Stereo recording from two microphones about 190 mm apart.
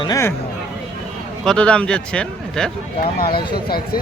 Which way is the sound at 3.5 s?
55° left (ahead or behind).